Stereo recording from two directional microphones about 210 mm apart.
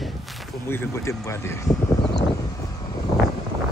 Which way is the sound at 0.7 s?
10° left (ahead or behind).